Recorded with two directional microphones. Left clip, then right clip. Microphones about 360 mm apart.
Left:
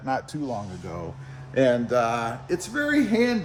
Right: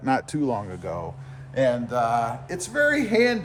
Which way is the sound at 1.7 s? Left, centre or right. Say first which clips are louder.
Even; right.